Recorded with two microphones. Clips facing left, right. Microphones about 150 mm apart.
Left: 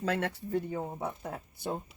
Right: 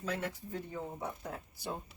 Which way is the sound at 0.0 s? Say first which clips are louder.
Left 6 dB; 80° left.